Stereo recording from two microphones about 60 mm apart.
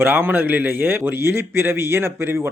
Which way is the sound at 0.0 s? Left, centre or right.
Right.